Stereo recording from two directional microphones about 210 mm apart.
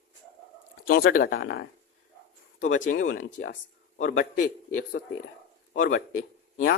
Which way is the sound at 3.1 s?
50° left (ahead or behind).